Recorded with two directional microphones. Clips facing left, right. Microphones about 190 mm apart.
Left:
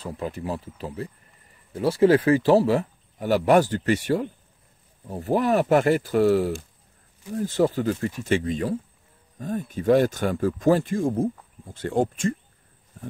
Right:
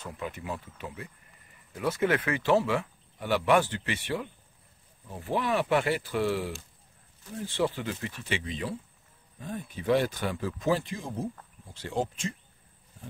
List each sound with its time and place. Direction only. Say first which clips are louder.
0.0 s speech: left 7 dB; 35° left (ahead or behind); by 12.4 s 50° left (ahead or behind)